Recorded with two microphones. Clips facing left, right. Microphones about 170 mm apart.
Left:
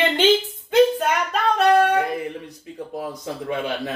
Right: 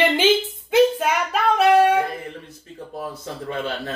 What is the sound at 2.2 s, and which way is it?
Speech, 15° left (ahead or behind).